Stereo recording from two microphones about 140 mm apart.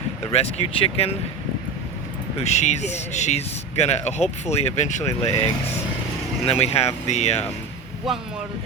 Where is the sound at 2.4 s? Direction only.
50° left (ahead or behind).